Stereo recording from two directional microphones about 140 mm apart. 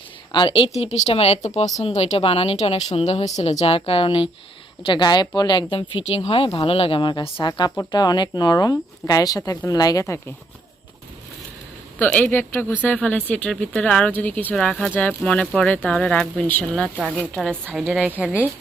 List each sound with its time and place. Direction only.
0.3 s a woman's voice: 40° left (ahead or behind)
5.7 s speech: 45° left (ahead or behind); by 10.2 s 25° left (ahead or behind)
11.9 s a woman's voice: 15° left (ahead or behind); by 18.4 s 10° right (ahead or behind)